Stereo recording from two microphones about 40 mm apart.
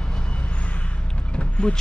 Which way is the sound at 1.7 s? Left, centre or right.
Left.